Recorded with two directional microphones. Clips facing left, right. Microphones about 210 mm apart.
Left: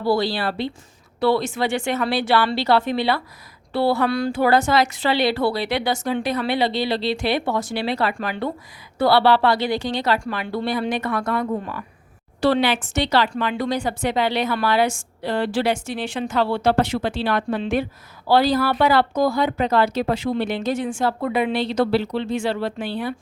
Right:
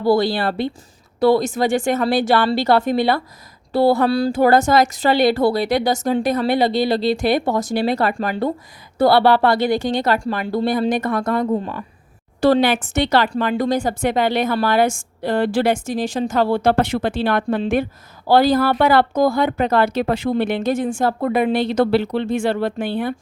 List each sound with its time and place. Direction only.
0.0 s a woman's voice: 50° right (ahead or behind)
4.3 s a woman's voice: 45° right (ahead or behind)
10.2 s a woman's voice: 35° right (ahead or behind)
11.5 s speech: 30° right (ahead or behind)
12.4 s a woman's voice: 45° right (ahead or behind)